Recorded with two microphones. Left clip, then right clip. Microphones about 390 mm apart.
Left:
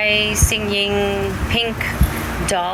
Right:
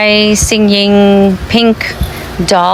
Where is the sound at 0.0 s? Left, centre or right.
Right.